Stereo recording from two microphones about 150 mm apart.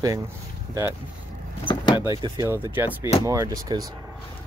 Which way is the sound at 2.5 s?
15° right (ahead or behind).